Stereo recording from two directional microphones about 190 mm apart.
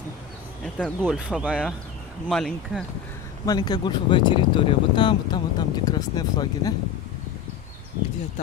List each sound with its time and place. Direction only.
0.7 s speech: 5° left (ahead or behind)
3.4 s speech: 20° left (ahead or behind)